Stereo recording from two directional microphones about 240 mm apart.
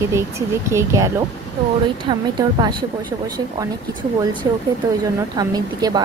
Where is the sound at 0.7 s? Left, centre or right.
Centre.